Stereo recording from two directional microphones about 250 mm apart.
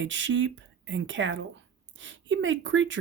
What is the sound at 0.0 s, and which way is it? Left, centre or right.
Speech, right.